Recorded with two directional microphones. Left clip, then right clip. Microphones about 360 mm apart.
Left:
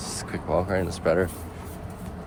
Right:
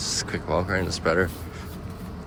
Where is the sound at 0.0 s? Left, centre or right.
Centre.